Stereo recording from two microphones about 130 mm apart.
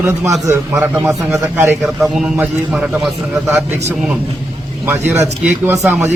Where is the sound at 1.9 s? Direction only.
Centre (ahead or behind).